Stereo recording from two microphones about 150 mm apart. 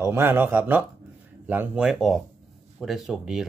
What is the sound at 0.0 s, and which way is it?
Speech, 15° right (ahead or behind).